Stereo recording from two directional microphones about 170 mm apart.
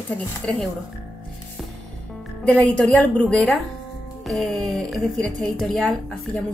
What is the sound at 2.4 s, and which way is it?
A woman's voice, 5° left (ahead or behind).